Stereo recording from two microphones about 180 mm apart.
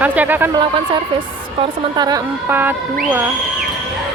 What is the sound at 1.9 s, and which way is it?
Speech, 20° right (ahead or behind).